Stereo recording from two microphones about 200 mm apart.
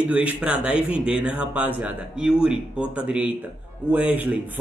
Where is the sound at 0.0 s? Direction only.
5° right (ahead or behind).